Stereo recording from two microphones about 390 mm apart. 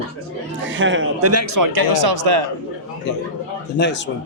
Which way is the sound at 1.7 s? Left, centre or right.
Right.